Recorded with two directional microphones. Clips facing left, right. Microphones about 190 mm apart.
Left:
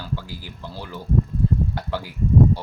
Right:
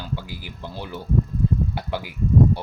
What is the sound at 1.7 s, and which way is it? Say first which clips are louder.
Speech: even; 15° right (ahead or behind).